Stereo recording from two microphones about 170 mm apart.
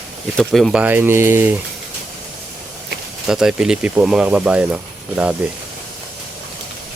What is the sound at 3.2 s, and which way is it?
Speech, centre (ahead or behind).